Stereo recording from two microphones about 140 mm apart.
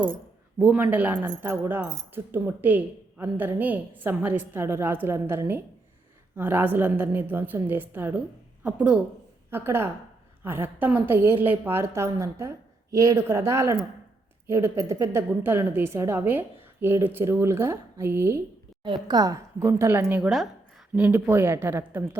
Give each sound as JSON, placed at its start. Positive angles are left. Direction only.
{"t": 0.6, "sound": "a woman's voice", "side_deg": -10}